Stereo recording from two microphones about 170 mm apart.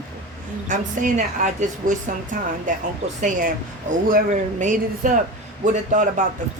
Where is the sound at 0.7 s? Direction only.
50° right (ahead or behind).